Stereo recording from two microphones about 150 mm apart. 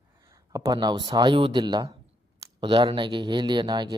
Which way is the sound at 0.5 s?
25° right (ahead or behind).